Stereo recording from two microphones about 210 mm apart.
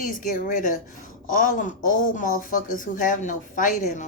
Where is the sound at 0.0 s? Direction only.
40° left (ahead or behind).